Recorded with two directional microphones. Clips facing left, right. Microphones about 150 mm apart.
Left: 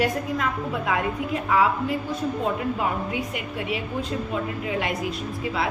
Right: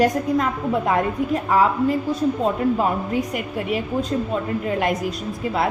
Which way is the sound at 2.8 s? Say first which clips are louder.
Right 5 dB; 45° right (ahead or behind).